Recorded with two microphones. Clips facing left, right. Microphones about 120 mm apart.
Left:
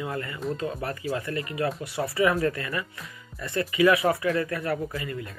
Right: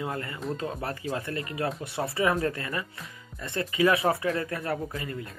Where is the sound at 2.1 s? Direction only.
30° right (ahead or behind).